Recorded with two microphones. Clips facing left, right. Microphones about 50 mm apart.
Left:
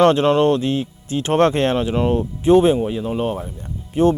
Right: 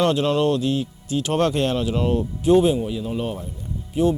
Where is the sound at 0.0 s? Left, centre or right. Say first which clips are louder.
Left 5 dB; left.